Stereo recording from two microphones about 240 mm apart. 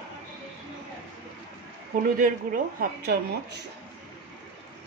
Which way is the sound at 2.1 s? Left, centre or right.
Right.